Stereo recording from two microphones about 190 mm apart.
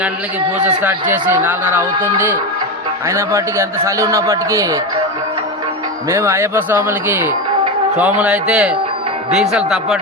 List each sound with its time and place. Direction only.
1.5 s a man's voice: 10° right (ahead or behind)
3.1 s a man's voice: 15° right (ahead or behind)
6.1 s a man's voice: 15° right (ahead or behind)